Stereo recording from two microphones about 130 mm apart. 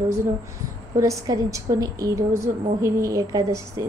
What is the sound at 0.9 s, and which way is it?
A woman's voice, 25° right (ahead or behind).